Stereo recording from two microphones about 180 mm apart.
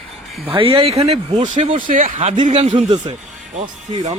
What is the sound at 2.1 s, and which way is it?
Speech, 35° right (ahead or behind).